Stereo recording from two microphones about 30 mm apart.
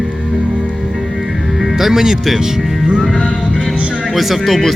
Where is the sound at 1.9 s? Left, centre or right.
Centre.